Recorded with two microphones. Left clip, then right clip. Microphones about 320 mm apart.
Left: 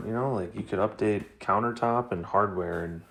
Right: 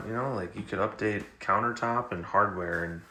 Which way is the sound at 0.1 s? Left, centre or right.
Centre.